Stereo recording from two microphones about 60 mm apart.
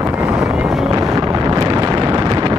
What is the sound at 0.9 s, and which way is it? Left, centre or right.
Wind noise, right.